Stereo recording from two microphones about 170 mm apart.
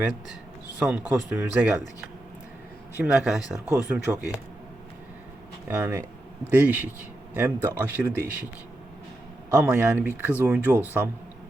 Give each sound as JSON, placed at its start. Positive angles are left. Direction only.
{"t": 0.9, "sound": "speech", "side_deg": -10}
{"t": 3.0, "sound": "speech", "side_deg": -5}
{"t": 5.6, "sound": "speech", "side_deg": -15}
{"t": 9.6, "sound": "speech", "side_deg": -10}